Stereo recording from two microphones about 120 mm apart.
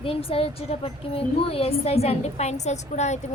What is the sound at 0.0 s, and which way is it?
A woman's voice, 50° left (ahead or behind).